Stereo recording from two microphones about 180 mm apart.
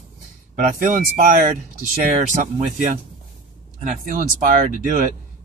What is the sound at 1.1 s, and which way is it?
Speech, 55° right (ahead or behind).